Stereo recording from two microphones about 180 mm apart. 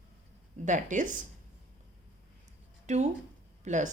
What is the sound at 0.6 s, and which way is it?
Speech, 45° right (ahead or behind).